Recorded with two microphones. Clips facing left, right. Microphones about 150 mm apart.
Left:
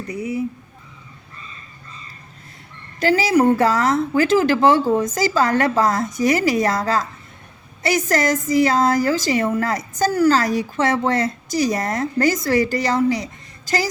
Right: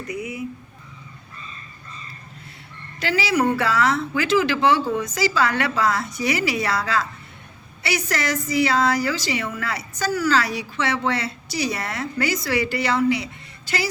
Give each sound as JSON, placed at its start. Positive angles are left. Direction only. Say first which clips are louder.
{"t": 0.1, "sound": "a woman's voice", "louder": "left 6 dB", "side_deg": 35}
{"t": 3.0, "sound": "a woman's voice", "louder": "left 5 dB", "side_deg": 45}